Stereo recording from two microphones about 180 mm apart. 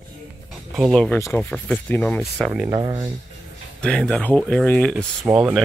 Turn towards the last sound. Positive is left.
turn(degrees=-5)  # may be behind; listen again after turning